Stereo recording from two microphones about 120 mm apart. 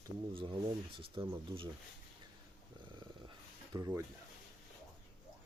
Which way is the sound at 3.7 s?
30° right (ahead or behind).